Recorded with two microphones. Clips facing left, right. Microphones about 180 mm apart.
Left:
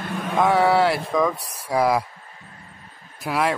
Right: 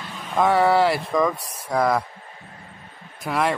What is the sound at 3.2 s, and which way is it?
Speech, centre (ahead or behind).